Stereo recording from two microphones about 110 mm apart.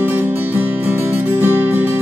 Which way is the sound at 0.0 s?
20° right (ahead or behind).